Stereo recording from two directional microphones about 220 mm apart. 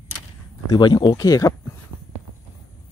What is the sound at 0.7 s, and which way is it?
Speech, 20° left (ahead or behind).